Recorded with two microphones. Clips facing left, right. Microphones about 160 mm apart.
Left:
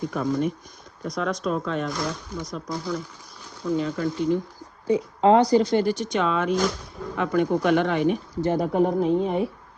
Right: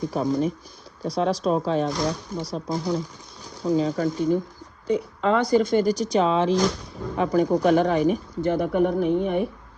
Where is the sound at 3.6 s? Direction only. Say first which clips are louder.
Right 3 dB; 35° right (ahead or behind).